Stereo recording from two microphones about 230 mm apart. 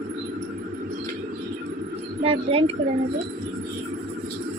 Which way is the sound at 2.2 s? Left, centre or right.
Right.